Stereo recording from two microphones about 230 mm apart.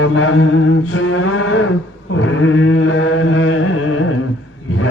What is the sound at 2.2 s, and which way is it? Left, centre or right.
Chant, left.